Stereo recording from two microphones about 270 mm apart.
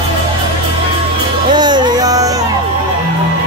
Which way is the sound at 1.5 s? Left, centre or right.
Centre.